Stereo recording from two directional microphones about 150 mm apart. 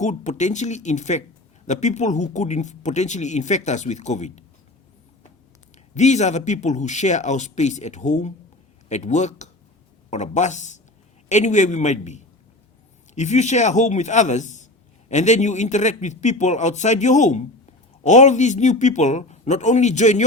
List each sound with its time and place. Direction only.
0.0 s a man's voice: 50° left (ahead or behind)
5.9 s a man's voice: 50° left (ahead or behind)